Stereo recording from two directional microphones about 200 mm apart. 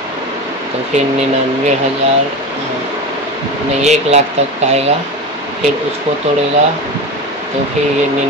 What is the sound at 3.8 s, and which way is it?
Speech, 35° right (ahead or behind).